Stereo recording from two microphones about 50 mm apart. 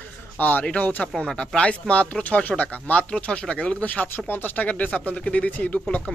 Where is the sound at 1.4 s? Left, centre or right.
Centre.